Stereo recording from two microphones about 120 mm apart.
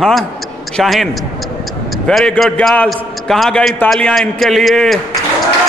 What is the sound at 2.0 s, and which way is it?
A man's voice, 5° left (ahead or behind).